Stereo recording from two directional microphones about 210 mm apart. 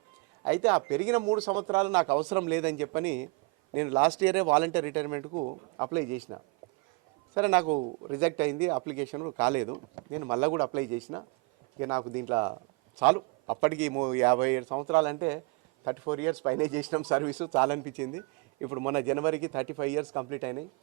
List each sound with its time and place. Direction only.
0.4 s speech: 15° right (ahead or behind)
2.1 s speech: 25° right (ahead or behind)
2.5 s speech: 15° right (ahead or behind)
5.3 s a man's voice: 30° right (ahead or behind)